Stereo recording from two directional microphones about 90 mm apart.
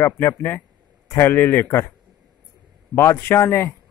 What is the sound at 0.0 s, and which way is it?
A man's voice, 25° left (ahead or behind).